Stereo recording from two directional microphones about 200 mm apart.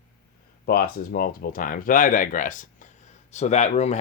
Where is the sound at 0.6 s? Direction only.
50° left (ahead or behind).